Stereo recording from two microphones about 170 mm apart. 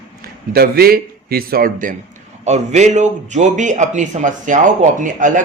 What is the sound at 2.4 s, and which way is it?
Speech, 40° right (ahead or behind).